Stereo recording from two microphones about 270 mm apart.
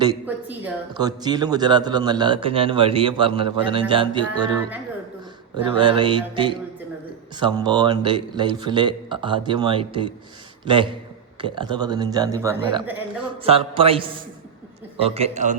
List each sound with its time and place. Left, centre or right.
0.0 s speech: centre
11.3 s a man's voice: centre